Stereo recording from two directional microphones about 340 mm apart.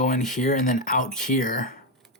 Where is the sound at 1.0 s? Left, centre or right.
Centre.